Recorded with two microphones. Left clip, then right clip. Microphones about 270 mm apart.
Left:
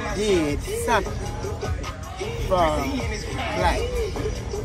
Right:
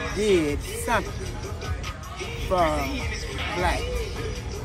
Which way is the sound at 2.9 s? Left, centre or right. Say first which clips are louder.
Left 2 dB; centre.